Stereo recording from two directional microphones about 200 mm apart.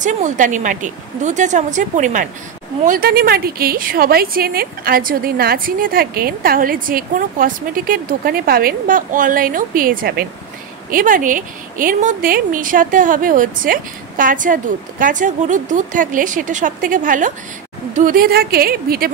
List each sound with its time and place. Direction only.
0.0 s a woman's voice: 40° right (ahead or behind)